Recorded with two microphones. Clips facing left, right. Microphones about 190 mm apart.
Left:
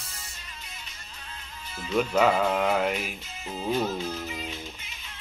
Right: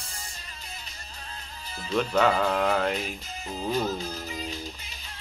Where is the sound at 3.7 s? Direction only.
40° right (ahead or behind).